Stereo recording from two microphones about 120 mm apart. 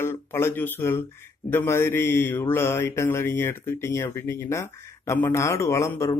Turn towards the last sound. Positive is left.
turn(degrees=25)  # may be behind; listen again after turning